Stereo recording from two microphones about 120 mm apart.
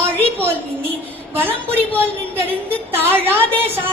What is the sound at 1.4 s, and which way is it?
A woman's voice, 15° right (ahead or behind).